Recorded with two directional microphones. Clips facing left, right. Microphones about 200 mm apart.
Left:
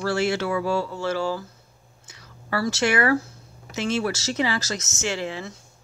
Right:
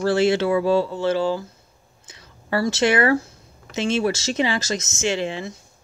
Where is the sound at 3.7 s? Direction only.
25° right (ahead or behind).